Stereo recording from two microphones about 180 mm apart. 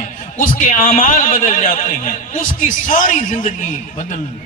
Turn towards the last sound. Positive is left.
turn(degrees=45)  # may be behind; listen again after turning